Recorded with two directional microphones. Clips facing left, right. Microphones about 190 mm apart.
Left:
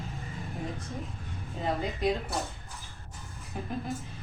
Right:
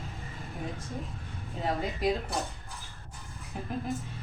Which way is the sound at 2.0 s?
Centre (ahead or behind).